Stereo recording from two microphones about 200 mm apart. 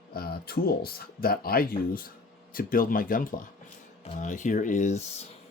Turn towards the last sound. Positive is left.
turn(degrees=35)  # may be behind; listen again after turning